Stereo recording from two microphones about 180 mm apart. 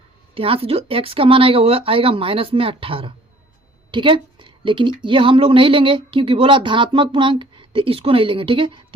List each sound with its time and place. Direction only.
0.3 s a woman's voice: 30° right (ahead or behind)